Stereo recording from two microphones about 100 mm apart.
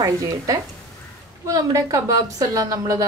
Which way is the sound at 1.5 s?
35° right (ahead or behind).